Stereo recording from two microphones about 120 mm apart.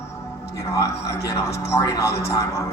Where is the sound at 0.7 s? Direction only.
25° left (ahead or behind).